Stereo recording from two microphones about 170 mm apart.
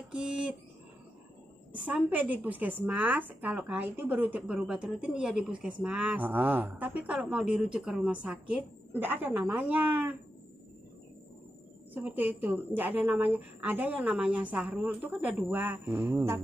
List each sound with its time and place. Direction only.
0.1 s a sound: 5° right (ahead or behind)
1.9 s a woman's voice: 10° right (ahead or behind)
11.9 s a woman's voice: 10° right (ahead or behind)